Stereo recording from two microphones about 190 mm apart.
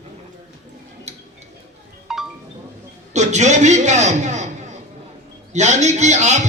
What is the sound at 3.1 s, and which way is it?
A man's voice, 40° right (ahead or behind).